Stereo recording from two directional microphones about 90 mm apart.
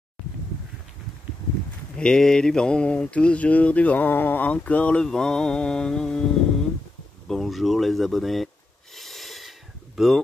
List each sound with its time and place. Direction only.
2.0 s mantra: 10° left (ahead or behind)
7.2 s speech: centre (ahead or behind)
8.9 s a sound: centre (ahead or behind)